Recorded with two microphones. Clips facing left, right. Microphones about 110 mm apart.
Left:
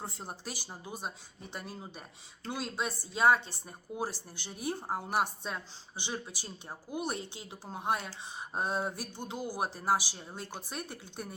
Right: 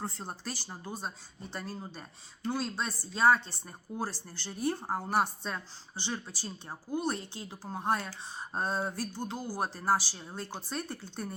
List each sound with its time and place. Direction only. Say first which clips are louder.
0.2 s speech: right 2 dB; 15° left (ahead or behind)